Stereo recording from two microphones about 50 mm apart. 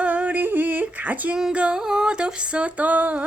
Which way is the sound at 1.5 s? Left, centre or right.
Right.